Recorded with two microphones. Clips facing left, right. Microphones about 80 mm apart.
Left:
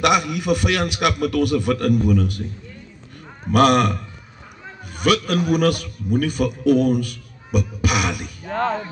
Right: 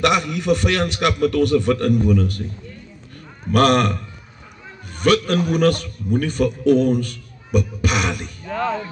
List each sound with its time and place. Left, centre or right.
0.0 s a man's voice: centre
3.5 s a man's voice: centre
8.5 s music: left